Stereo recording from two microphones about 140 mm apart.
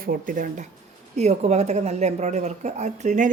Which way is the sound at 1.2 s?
55° right (ahead or behind).